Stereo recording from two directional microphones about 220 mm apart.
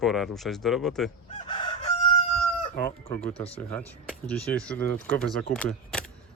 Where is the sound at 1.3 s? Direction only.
25° left (ahead or behind).